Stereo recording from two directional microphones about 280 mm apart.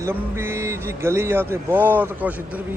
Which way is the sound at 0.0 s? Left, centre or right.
Centre.